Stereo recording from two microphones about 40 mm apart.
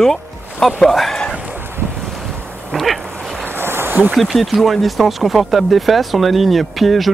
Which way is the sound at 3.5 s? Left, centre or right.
Right.